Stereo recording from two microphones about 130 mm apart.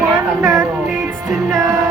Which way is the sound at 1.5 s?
25° right (ahead or behind).